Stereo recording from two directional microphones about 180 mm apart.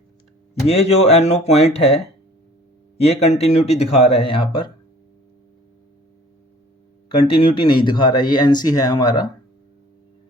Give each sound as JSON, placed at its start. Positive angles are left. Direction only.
{"t": 0.7, "sound": "speech", "side_deg": 35}
{"t": 3.0, "sound": "speech", "side_deg": 35}
{"t": 7.3, "sound": "speech", "side_deg": 30}